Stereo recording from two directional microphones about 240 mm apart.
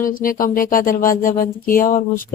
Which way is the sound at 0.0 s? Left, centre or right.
Left.